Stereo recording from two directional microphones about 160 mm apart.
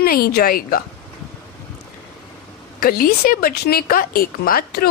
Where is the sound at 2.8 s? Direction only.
65° left (ahead or behind).